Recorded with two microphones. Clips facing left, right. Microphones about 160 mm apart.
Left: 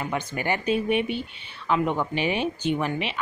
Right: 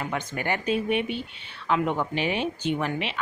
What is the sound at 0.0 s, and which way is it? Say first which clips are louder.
Speech: left 1 dB; 5° left (ahead or behind).